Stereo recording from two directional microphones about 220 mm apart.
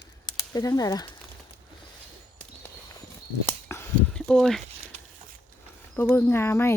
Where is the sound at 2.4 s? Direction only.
10° left (ahead or behind).